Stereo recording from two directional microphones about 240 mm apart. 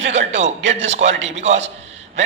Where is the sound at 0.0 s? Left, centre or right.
Right.